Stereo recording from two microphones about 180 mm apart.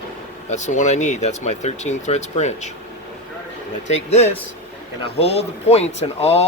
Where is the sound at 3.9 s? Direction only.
35° left (ahead or behind).